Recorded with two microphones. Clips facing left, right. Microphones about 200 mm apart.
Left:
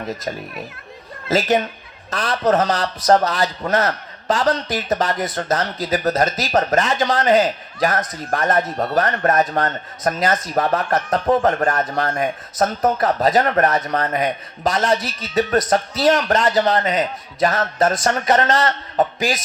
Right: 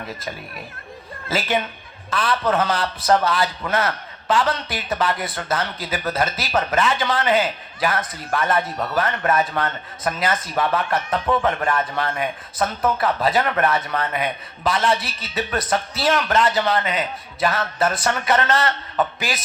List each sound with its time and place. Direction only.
0.1 s a man's voice: 45° left (ahead or behind)